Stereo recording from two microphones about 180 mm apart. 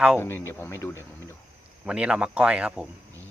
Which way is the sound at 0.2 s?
15° left (ahead or behind).